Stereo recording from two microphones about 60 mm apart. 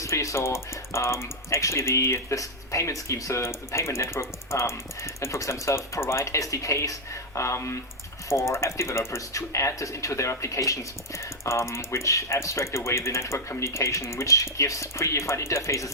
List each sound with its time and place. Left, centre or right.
0.0 s speech: left